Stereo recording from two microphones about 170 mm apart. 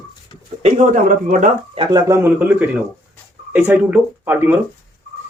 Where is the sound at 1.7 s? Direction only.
25° right (ahead or behind).